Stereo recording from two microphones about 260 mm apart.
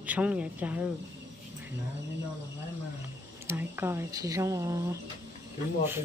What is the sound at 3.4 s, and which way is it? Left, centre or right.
Speech, centre.